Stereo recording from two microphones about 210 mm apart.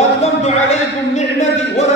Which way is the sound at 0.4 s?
30° left (ahead or behind).